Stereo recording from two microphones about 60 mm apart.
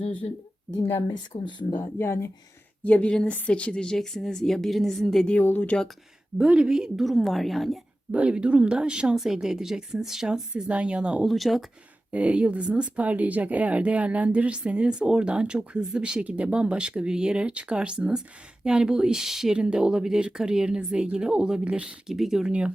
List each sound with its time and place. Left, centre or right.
2.0 s speech: left
2.8 s a woman's voice: left; by 5.3 s centre
5.4 s speech: left
6.5 s a woman's voice: centre
8.1 s speech: centre
10.5 s speech: right
11.3 s a woman's voice: centre
12.1 s speech: right